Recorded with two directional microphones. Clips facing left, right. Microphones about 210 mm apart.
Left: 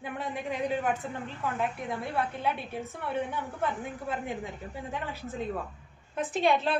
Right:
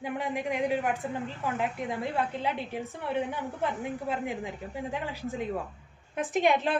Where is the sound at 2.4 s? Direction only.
15° right (ahead or behind).